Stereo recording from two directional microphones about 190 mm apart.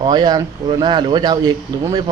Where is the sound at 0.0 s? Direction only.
20° right (ahead or behind).